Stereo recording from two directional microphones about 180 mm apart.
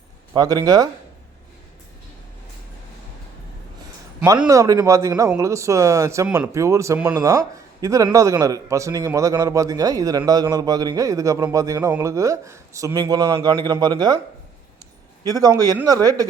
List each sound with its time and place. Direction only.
0.3 s a man's voice: 20° right (ahead or behind)
4.2 s a man's voice: 15° right (ahead or behind)
15.2 s a man's voice: 20° right (ahead or behind)